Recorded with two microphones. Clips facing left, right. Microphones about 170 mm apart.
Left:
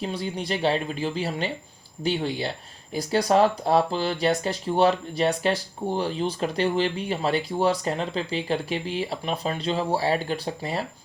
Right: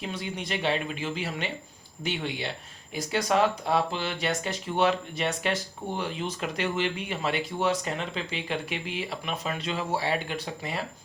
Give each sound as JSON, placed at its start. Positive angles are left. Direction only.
{"t": 0.0, "sound": "speech", "side_deg": 35}